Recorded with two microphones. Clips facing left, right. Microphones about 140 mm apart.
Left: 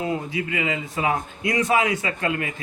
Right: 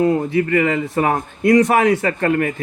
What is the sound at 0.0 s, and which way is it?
A man's voice, 50° right (ahead or behind).